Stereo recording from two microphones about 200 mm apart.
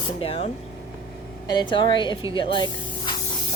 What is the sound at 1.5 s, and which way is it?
Speech, 20° left (ahead or behind).